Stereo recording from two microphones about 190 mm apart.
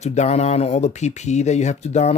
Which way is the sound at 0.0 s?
35° left (ahead or behind).